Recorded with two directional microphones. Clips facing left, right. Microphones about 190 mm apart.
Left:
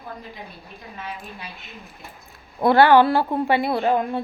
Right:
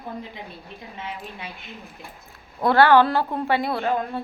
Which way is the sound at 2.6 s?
15° left (ahead or behind).